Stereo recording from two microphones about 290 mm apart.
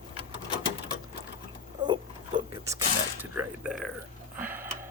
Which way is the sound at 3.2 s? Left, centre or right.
Centre.